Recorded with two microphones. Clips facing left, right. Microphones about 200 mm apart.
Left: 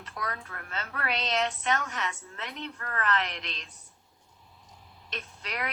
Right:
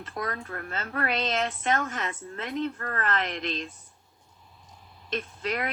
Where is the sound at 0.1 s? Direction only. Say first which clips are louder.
Right 4 dB; 45° right (ahead or behind).